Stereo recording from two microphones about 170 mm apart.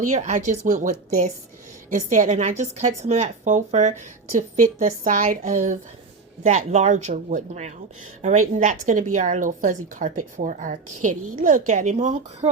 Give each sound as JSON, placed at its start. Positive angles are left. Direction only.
{"t": 0.0, "sound": "a woman's voice", "side_deg": -45}